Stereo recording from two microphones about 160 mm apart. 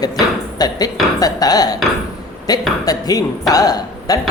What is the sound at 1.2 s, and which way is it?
A woman's voice, 25° left (ahead or behind).